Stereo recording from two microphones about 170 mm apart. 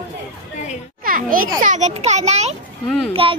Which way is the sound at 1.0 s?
55° right (ahead or behind).